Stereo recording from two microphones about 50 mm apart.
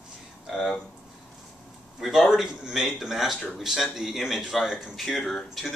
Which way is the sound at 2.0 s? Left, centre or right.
Centre.